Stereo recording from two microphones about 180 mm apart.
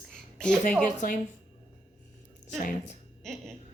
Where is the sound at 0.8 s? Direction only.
45° left (ahead or behind).